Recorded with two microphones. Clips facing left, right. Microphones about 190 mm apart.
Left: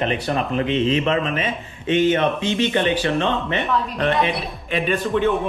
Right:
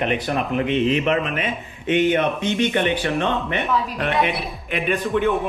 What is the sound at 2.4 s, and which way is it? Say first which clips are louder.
Speech: left 1 dB; 30° left (ahead or behind).